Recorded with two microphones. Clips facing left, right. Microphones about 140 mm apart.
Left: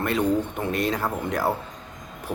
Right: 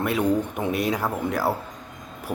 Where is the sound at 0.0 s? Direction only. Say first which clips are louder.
Even; 10° right (ahead or behind).